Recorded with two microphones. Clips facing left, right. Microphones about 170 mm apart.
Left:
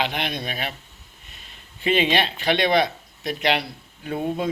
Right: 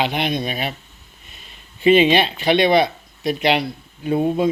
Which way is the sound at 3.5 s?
20° right (ahead or behind).